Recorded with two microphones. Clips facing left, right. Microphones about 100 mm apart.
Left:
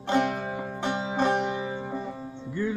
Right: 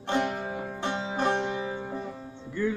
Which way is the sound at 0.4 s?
40° left (ahead or behind).